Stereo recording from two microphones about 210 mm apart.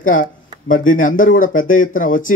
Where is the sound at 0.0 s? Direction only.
40° left (ahead or behind).